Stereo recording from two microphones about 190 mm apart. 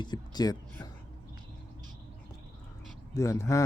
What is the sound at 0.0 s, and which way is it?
Speech, 20° left (ahead or behind).